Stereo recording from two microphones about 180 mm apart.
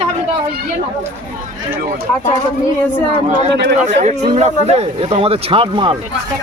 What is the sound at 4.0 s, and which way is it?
Speech, 35° right (ahead or behind).